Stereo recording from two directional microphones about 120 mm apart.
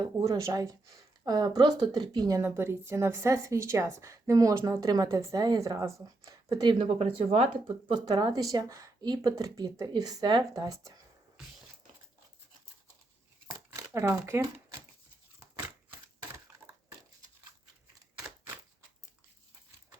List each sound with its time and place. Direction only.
0.0 s speech: 35° right (ahead or behind)
2.4 s a woman's voice: 20° right (ahead or behind); by 6.9 s 40° right (ahead or behind)
7.0 s speech: 55° right (ahead or behind)
7.9 s speech: 35° right (ahead or behind)
13.7 s speech: 25° right (ahead or behind)